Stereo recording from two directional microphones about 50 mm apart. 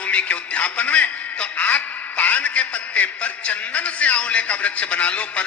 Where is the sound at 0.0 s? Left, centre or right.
Left.